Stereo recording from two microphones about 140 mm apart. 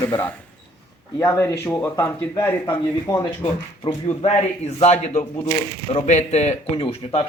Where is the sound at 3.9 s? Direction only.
45° left (ahead or behind).